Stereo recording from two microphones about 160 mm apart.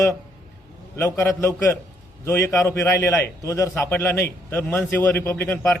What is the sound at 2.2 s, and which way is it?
A man's voice, 20° left (ahead or behind).